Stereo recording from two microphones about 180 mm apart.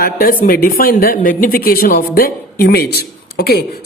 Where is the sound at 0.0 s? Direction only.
55° left (ahead or behind).